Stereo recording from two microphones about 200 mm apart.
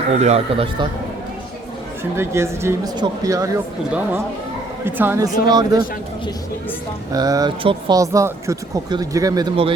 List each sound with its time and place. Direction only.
0.1 s speech: 35° right (ahead or behind)
2.1 s speech: 15° right (ahead or behind)
7.1 s speech: 20° right (ahead or behind)